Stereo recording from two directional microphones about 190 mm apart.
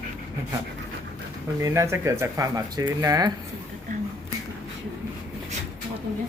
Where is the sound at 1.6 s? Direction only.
15° right (ahead or behind).